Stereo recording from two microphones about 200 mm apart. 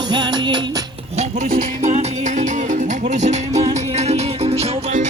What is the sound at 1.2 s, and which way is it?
Music, 35° right (ahead or behind).